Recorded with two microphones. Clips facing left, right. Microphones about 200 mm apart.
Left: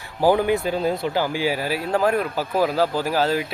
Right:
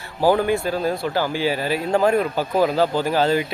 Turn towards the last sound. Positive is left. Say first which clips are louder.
# right 2 dB
turn(degrees=5)  # may be behind; listen again after turning